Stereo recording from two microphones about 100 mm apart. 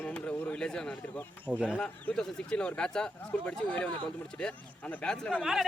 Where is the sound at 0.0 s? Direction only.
10° left (ahead or behind).